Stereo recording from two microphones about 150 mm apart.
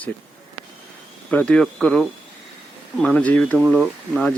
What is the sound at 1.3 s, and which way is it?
Speech, 10° left (ahead or behind).